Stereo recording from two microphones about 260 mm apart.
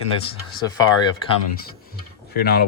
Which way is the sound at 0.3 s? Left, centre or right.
Centre.